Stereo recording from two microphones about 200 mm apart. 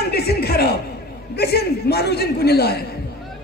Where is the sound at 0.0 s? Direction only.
50° left (ahead or behind).